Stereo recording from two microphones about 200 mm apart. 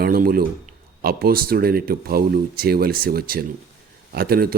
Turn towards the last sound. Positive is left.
turn(degrees=-50)  # may be behind; listen again after turning